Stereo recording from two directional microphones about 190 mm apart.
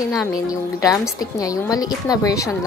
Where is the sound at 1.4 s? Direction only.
20° left (ahead or behind).